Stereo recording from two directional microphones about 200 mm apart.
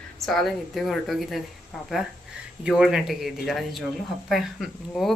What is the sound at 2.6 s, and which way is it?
Speech, 5° right (ahead or behind).